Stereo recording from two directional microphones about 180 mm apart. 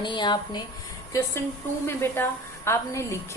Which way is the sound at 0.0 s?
25° left (ahead or behind).